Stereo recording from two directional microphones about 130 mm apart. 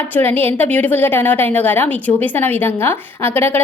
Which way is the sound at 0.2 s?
15° left (ahead or behind).